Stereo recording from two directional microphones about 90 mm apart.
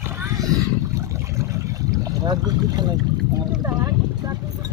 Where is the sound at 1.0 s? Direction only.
35° right (ahead or behind); by 2.9 s 50° right (ahead or behind).